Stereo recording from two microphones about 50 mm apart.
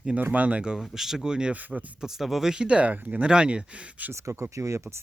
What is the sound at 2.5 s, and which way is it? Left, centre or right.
Speech, right.